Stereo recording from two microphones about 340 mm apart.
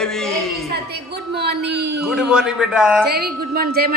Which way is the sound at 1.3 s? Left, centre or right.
Right.